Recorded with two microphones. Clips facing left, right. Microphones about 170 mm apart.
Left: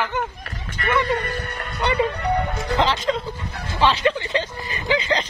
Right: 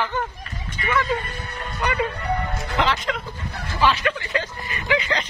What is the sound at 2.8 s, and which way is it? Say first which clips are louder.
Speech: left 2 dB; 30° left (ahead or behind).